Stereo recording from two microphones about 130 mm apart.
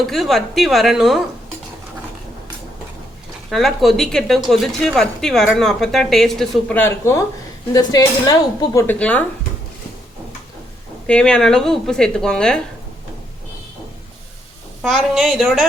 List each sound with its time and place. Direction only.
0.0 s a woman's voice: centre (ahead or behind)
3.5 s a woman's voice: centre (ahead or behind)
6.7 s speech: 20° left (ahead or behind)
8.9 s speech: 10° left (ahead or behind)
11.0 s a woman's voice: 5° left (ahead or behind)
14.8 s a woman's voice: centre (ahead or behind)